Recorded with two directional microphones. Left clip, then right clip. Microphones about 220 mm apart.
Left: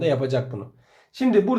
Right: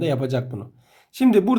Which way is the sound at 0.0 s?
30° right (ahead or behind).